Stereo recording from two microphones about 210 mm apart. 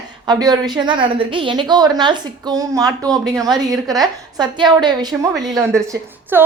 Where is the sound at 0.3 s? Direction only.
20° right (ahead or behind).